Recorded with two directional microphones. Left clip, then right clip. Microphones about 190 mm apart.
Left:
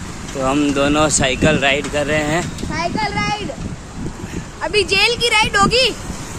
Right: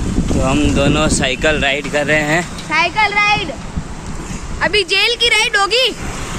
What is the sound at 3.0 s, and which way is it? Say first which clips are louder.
Speech: right 8 dB; 15° right (ahead or behind).